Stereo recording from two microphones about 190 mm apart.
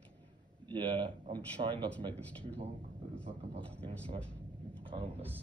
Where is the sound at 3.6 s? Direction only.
5° left (ahead or behind).